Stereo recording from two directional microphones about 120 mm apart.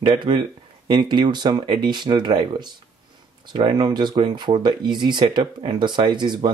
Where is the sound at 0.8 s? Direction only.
40° right (ahead or behind).